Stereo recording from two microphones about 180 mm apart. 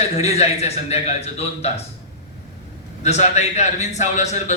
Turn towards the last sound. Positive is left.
turn(degrees=40)  # may be behind; listen again after turning